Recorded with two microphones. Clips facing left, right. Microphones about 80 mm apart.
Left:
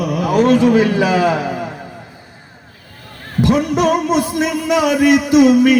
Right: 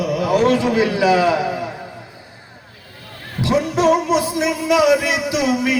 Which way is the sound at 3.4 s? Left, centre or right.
Left.